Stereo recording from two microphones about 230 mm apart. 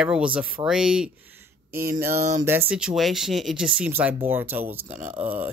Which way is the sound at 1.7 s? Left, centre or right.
Right.